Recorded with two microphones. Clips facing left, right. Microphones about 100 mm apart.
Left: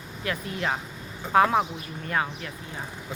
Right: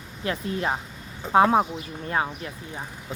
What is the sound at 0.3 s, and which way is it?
Speech, 30° right (ahead or behind).